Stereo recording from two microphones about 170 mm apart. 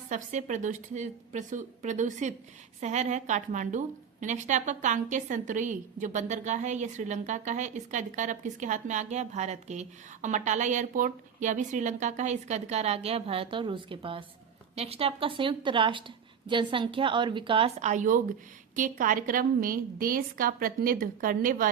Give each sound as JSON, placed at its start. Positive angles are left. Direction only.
{"t": 0.1, "sound": "a woman's voice", "side_deg": -45}